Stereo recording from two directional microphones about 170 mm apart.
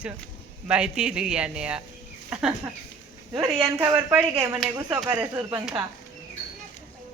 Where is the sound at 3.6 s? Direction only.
15° right (ahead or behind).